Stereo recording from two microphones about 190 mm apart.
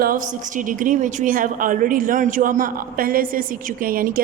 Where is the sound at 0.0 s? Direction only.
45° right (ahead or behind).